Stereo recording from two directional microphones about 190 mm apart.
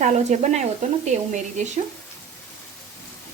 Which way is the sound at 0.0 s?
40° right (ahead or behind).